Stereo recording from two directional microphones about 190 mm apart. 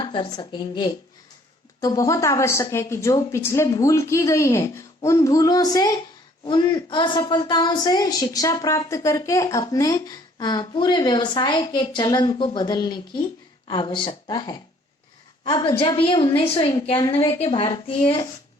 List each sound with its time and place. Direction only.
0.0 s a woman's voice: 25° left (ahead or behind)